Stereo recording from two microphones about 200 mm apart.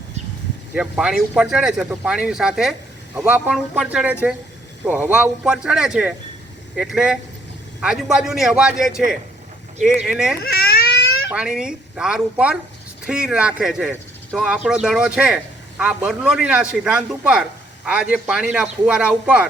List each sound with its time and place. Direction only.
0.7 s a man's voice: 5° right (ahead or behind)
10.4 s baby cry: 50° left (ahead or behind)
11.3 s a man's voice: 5° right (ahead or behind)